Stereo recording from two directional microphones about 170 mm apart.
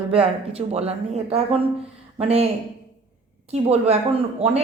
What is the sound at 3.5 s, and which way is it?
Speech, 35° right (ahead or behind).